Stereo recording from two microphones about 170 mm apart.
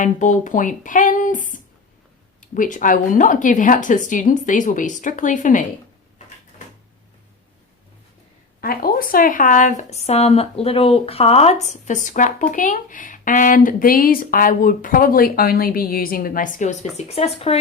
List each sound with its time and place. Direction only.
0.0 s speech: 50° left (ahead or behind)
8.6 s speech: 60° left (ahead or behind); by 17.6 s 35° left (ahead or behind)